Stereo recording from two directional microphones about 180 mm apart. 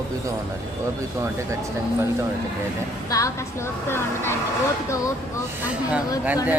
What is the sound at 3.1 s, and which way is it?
A woman's voice, 15° left (ahead or behind).